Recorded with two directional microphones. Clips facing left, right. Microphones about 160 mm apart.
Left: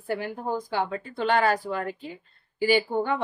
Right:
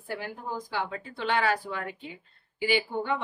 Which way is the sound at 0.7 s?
45° left (ahead or behind).